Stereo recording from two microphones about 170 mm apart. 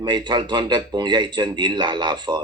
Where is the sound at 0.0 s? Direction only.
25° right (ahead or behind).